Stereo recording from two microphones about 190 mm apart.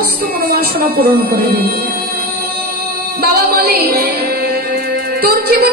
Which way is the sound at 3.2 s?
55° right (ahead or behind).